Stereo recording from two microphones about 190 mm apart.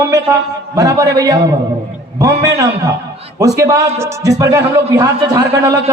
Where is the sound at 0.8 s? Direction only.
20° right (ahead or behind).